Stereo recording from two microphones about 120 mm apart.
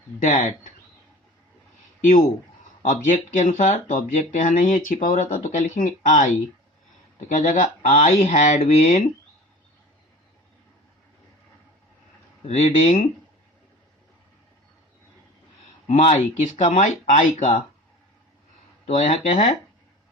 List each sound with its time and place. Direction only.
0.2 s speech: 90° left
2.8 s speech: 90° left; by 9.0 s 65° left (ahead or behind)
12.5 s speech: 65° left (ahead or behind)
15.9 s speech: 80° left
18.9 s speech: 80° left